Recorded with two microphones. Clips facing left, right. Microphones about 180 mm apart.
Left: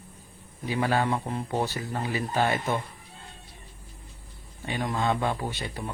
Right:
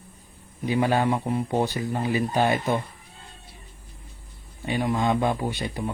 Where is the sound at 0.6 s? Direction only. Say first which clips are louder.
Right 4 dB; 20° right (ahead or behind).